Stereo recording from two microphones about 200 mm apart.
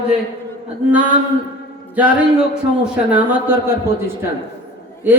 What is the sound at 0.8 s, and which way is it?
Speech, 5° right (ahead or behind).